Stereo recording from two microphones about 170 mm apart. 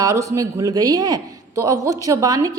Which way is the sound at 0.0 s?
20° right (ahead or behind).